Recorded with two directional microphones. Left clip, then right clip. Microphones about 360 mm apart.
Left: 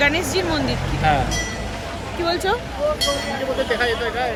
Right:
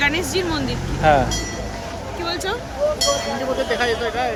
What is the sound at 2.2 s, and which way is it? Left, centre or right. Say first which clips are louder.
Speech: left 4 dB; centre.